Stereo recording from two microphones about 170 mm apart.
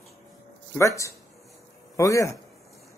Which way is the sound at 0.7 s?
20° left (ahead or behind).